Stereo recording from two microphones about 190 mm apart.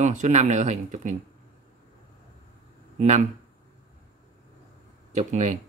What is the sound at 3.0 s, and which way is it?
Speech, 35° right (ahead or behind).